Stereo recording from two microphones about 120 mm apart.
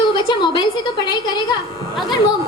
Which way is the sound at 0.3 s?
40° left (ahead or behind).